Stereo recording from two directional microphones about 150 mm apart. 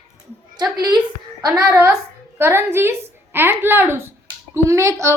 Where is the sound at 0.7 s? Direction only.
25° right (ahead or behind).